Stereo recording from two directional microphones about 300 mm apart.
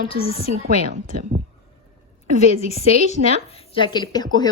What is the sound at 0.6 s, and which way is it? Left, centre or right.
Speech, right.